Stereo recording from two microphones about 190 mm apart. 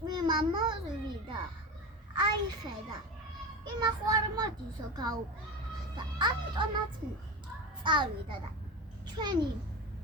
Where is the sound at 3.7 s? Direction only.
20° right (ahead or behind).